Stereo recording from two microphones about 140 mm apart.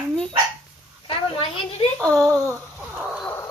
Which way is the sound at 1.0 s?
40° left (ahead or behind).